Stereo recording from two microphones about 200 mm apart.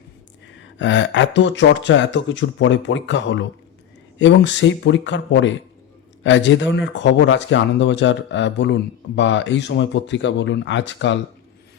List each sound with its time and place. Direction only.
0.4 s speech: 65° left (ahead or behind)